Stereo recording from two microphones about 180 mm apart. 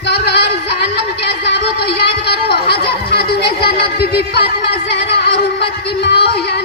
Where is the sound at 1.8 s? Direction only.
60° left (ahead or behind).